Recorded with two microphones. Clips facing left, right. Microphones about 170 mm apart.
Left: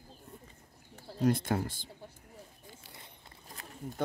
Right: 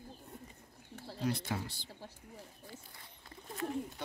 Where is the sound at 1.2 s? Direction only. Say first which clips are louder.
Left 7 dB; 50° left (ahead or behind).